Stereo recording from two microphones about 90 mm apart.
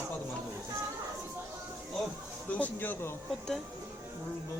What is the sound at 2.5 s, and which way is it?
Speech, 20° left (ahead or behind).